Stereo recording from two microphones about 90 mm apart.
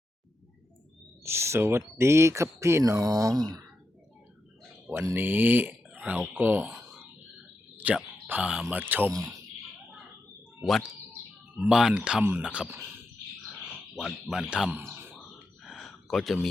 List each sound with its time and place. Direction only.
1.2 s speech: 30° right (ahead or behind)
3.0 s speech: 40° right (ahead or behind)
5.0 s speech: 25° right (ahead or behind)
7.8 s speech: 20° right (ahead or behind)
10.6 s speech: centre (ahead or behind)
13.7 s speech: centre (ahead or behind)
14.7 s speech: 25° right (ahead or behind)
15.6 s a sound: centre (ahead or behind)